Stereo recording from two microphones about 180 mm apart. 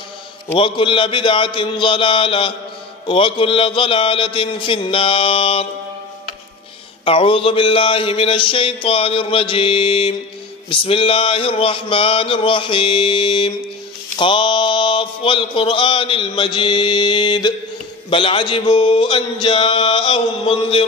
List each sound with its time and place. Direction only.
0.6 s mantra: 30° left (ahead or behind)
7.1 s a sound: 30° left (ahead or behind)
10.7 s mantra: 30° left (ahead or behind)